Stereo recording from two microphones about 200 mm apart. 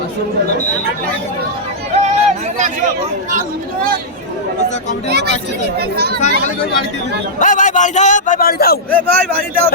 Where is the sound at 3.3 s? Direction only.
45° right (ahead or behind).